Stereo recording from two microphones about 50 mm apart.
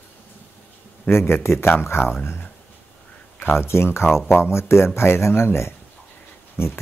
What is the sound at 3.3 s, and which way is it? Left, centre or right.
Speech, left.